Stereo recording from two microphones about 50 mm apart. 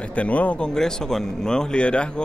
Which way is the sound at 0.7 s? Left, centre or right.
Centre.